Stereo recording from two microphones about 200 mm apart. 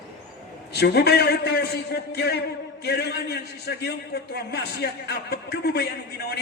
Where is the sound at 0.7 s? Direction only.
55° left (ahead or behind).